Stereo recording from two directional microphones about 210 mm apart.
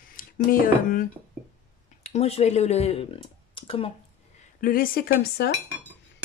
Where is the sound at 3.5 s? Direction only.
25° left (ahead or behind).